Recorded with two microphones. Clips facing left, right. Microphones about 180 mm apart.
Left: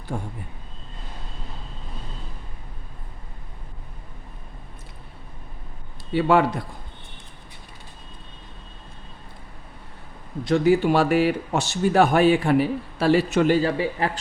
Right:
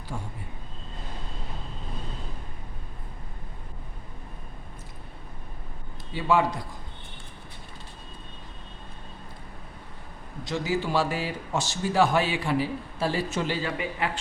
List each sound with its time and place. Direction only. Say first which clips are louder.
0.1 s speech: left 6 dB; 55° left (ahead or behind)
6.1 s speech: left 5 dB; 65° left (ahead or behind)
10.4 s speech: left 10 dB; 60° left (ahead or behind)
13.6 s speech: left 7 dB; 35° left (ahead or behind)